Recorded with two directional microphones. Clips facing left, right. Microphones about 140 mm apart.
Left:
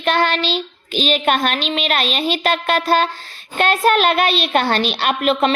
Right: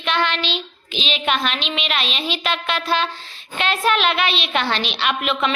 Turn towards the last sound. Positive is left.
turn(degrees=40)  # may be behind; listen again after turning